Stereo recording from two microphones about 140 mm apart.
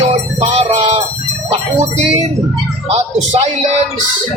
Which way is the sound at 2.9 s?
50° right (ahead or behind).